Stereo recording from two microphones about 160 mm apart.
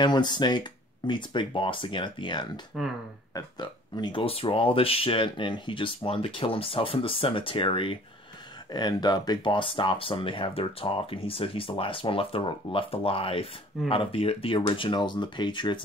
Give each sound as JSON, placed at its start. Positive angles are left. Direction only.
{"t": 0.0, "sound": "speech", "side_deg": 25}